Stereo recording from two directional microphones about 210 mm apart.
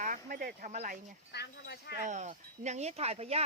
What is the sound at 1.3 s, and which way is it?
Speech, 50° left (ahead or behind).